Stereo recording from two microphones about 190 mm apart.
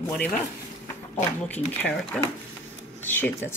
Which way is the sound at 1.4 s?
10° left (ahead or behind).